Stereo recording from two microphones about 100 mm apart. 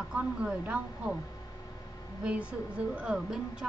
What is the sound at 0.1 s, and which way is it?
A woman's voice, 10° right (ahead or behind).